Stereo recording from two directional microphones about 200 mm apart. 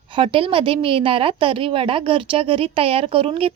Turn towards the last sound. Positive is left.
turn(degrees=-25)  # may be behind; listen again after turning